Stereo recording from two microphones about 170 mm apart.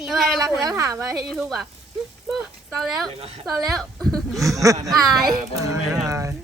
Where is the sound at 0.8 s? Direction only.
20° right (ahead or behind).